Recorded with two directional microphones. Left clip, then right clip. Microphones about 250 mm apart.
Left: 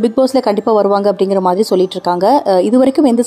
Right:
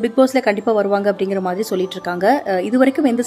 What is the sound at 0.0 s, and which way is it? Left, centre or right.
A woman's voice, centre.